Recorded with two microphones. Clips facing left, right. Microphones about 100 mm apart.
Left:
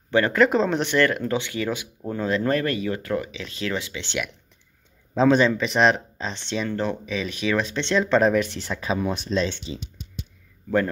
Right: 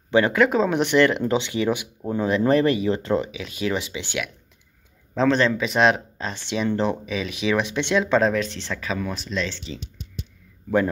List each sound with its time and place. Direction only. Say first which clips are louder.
0.1 s speech: right 2 dB; 15° right (ahead or behind)
0.4 s speech: even; 5° right (ahead or behind); by 3.3 s 25° right (ahead or behind)
3.3 s speech: right 3 dB; 15° right (ahead or behind)
5.1 s speech: left 2 dB; 10° left (ahead or behind)
5.6 s speech: even; centre (ahead or behind)
8.2 s speech: left 1 dB; 5° left (ahead or behind)
8.7 s speech: left 3 dB; 20° left (ahead or behind)